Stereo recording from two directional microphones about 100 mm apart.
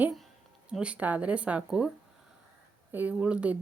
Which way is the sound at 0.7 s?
10° right (ahead or behind).